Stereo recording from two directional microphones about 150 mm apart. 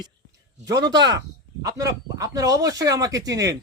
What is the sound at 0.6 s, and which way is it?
Speech, 25° right (ahead or behind).